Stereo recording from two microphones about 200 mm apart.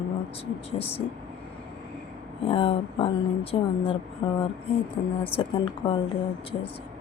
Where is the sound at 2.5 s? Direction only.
25° left (ahead or behind).